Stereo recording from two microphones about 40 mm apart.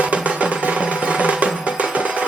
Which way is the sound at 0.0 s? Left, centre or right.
Right.